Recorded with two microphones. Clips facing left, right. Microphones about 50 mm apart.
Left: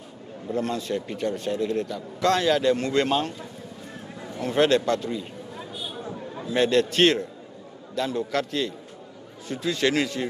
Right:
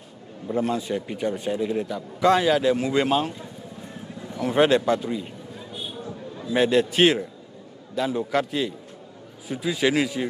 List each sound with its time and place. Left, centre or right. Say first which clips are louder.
0.5 s a man's voice: right 2 dB; centre
4.4 s a man's voice: right 2 dB; centre
6.0 s a sound: left 1 dB; left
6.5 s a man's voice: right 1 dB; centre